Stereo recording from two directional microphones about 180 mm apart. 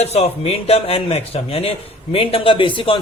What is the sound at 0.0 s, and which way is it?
Speech, 35° left (ahead or behind).